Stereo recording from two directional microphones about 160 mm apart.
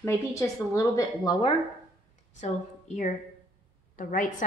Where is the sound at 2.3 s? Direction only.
50° left (ahead or behind).